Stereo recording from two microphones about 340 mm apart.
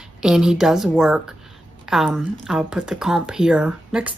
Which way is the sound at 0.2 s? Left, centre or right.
Centre.